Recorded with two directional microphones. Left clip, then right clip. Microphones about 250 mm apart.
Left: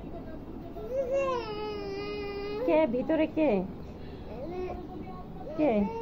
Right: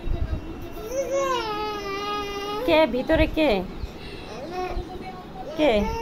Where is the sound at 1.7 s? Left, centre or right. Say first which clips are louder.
Right 7 dB; right.